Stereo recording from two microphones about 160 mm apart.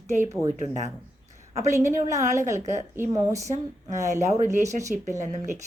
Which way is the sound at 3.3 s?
45° right (ahead or behind).